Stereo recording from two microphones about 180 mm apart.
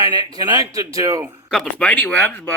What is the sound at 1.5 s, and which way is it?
Speech, 5° left (ahead or behind).